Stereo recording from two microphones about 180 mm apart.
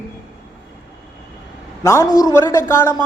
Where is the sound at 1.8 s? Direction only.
15° left (ahead or behind).